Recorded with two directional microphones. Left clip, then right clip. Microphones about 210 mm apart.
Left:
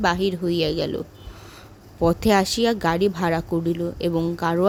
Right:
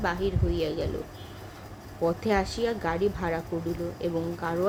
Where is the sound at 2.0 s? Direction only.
55° left (ahead or behind).